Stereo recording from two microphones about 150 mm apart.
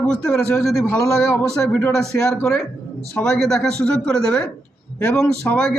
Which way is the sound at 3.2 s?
5° left (ahead or behind).